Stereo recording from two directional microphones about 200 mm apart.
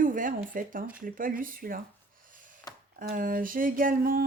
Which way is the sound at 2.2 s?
40° right (ahead or behind).